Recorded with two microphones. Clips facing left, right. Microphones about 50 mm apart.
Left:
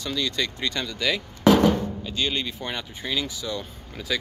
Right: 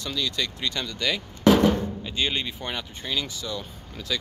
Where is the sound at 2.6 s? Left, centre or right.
Centre.